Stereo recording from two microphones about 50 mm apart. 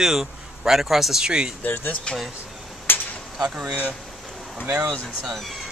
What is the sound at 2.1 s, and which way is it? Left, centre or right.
Speech, left.